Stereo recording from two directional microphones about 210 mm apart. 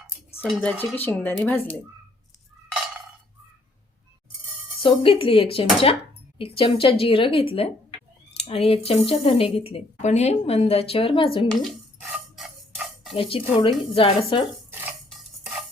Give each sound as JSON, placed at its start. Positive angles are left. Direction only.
{"t": 0.4, "sound": "speech", "side_deg": 0}
{"t": 4.8, "sound": "speech", "side_deg": 25}
{"t": 12.0, "sound": "a sound", "side_deg": -5}
{"t": 13.1, "sound": "speech", "side_deg": 25}
{"t": 14.7, "sound": "dishes", "side_deg": -10}